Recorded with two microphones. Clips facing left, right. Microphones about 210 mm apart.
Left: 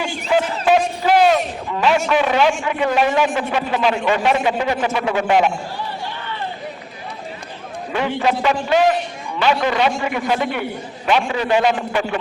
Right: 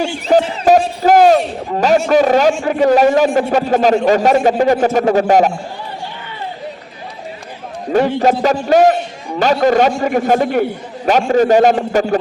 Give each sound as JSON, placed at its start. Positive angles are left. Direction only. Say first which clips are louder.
{"t": 0.0, "sound": "a man's voice", "louder": "right 6 dB", "side_deg": -40}
{"t": 7.9, "sound": "a man's voice", "louder": "right 7 dB", "side_deg": -45}